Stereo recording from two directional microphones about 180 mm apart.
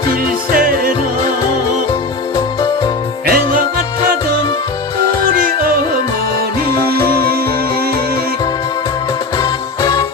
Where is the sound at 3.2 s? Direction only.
55° right (ahead or behind).